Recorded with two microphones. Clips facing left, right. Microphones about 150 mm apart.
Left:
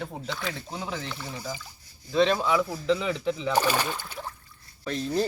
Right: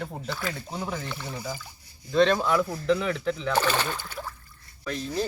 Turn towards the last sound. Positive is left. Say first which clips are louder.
# left 3 dB
turn(degrees=30)  # may be behind; listen again after turning